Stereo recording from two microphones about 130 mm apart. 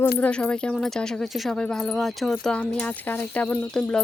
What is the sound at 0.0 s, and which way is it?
Speech, 10° left (ahead or behind).